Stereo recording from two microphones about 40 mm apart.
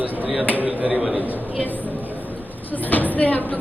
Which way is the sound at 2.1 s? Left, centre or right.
Right.